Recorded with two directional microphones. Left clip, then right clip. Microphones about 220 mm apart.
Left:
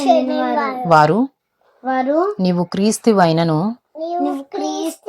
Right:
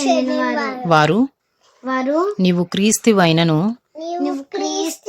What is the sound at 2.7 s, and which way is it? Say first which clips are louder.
Speech: left 1 dB; 30° right (ahead or behind).